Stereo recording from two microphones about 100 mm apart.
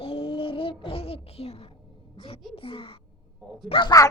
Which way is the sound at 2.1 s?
70° left (ahead or behind).